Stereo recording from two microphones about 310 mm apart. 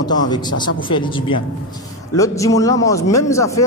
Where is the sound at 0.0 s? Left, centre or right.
Centre.